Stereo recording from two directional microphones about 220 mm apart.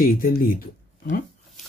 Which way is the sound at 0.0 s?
40° left (ahead or behind).